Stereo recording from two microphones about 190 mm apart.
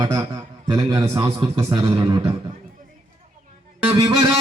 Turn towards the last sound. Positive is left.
turn(degrees=-20)  # may be behind; listen again after turning